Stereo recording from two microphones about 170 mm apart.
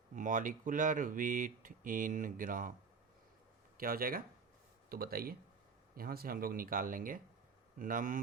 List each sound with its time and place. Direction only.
0.2 s speech: 50° right (ahead or behind)
3.8 s speech: 60° right (ahead or behind)